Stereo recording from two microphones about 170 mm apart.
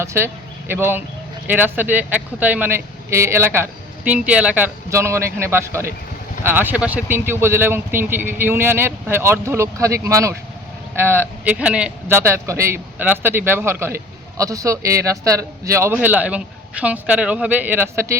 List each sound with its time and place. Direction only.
0.0 s speech: 15° right (ahead or behind)